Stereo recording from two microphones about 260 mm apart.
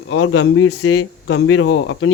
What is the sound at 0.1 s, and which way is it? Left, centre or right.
Speech, left.